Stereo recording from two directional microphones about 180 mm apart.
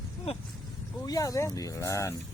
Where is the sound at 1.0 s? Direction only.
20° left (ahead or behind).